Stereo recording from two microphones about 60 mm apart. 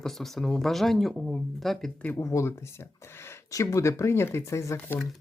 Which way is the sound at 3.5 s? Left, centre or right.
Left.